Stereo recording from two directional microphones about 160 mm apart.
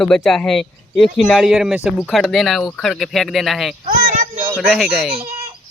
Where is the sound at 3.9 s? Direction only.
55° right (ahead or behind).